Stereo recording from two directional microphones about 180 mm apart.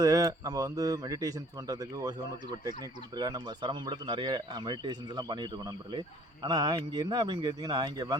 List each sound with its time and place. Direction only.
0.0 s speech: 20° right (ahead or behind)
3.2 s speech: 25° right (ahead or behind)